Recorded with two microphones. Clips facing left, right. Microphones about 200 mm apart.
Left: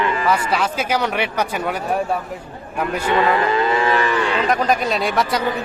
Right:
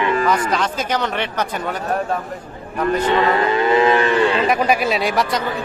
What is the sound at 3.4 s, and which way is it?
Music, 20° right (ahead or behind).